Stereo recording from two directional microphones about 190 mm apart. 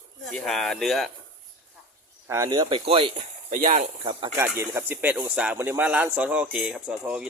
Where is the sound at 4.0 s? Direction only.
30° right (ahead or behind).